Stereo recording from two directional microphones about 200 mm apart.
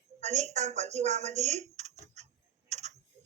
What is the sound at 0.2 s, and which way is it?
Speech, 35° right (ahead or behind).